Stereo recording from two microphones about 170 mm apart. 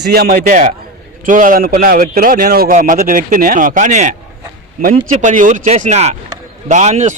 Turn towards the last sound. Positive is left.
turn(degrees=-45)  # may be behind; listen again after turning